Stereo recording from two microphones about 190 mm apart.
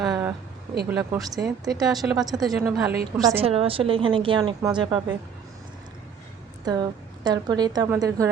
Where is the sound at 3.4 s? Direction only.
30° right (ahead or behind).